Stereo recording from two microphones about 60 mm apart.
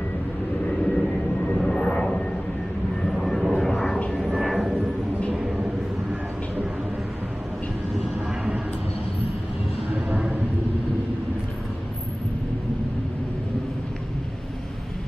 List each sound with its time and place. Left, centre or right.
0.7 s vehicle: centre
3.1 s vehicle: centre
5.3 s vehicle: centre